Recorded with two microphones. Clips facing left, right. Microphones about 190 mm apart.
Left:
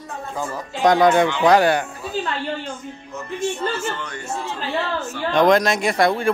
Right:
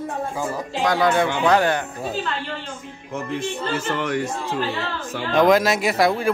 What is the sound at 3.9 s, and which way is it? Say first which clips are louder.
Speech: right 9 dB; 90° right.